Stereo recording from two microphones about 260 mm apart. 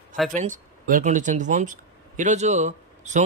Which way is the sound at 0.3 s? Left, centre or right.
Right.